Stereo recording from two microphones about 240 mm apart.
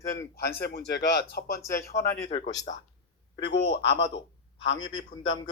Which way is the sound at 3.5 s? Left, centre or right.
Left.